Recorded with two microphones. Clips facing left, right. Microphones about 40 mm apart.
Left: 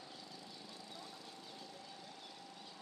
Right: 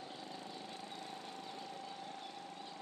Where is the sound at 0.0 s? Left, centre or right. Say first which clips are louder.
Right 5 dB; right.